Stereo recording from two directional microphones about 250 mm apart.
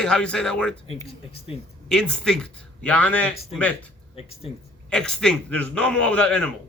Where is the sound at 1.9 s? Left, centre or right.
Centre.